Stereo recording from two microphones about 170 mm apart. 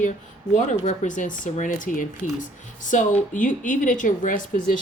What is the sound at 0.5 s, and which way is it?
A woman's voice, 45° left (ahead or behind).